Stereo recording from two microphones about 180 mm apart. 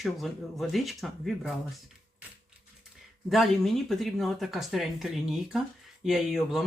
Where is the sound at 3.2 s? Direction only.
Centre (ahead or behind).